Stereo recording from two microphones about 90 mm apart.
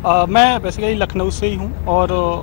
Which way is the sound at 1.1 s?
25° left (ahead or behind).